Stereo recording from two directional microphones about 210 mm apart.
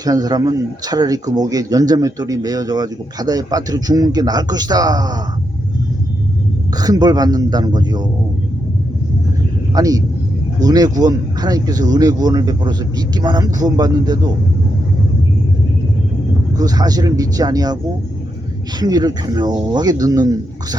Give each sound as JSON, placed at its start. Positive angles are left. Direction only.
{"t": 0.0, "sound": "speech", "side_deg": -20}
{"t": 6.7, "sound": "speech", "side_deg": -20}
{"t": 9.7, "sound": "speech", "side_deg": -15}
{"t": 16.6, "sound": "speech", "side_deg": -20}
{"t": 18.8, "sound": "speech", "side_deg": -20}